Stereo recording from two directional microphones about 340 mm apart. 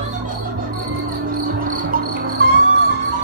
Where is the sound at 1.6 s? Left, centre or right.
Right.